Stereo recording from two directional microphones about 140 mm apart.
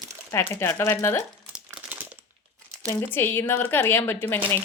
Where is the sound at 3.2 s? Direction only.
15° left (ahead or behind).